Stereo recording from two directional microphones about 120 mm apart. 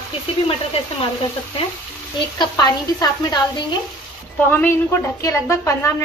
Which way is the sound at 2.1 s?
35° left (ahead or behind).